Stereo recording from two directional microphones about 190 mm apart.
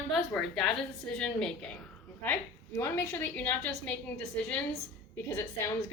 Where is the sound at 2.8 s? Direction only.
10° left (ahead or behind).